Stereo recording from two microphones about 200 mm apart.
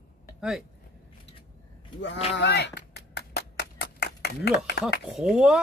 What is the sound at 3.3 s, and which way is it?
Clapping, 55° left (ahead or behind).